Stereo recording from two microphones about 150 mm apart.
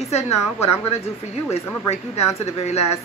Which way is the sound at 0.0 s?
45° left (ahead or behind).